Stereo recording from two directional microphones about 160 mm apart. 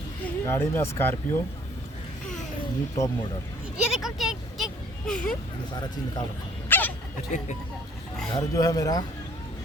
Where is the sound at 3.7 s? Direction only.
5° right (ahead or behind).